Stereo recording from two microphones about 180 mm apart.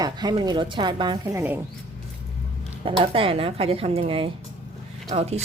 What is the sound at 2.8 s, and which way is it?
A woman's voice, 30° right (ahead or behind).